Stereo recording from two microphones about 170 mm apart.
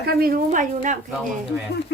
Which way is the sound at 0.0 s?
65° right (ahead or behind).